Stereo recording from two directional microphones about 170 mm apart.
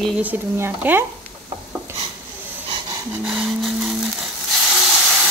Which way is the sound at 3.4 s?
Centre (ahead or behind).